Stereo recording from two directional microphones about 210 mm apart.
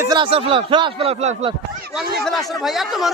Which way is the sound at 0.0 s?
20° right (ahead or behind).